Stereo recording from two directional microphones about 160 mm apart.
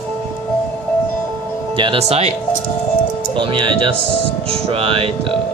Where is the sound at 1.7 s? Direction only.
30° right (ahead or behind).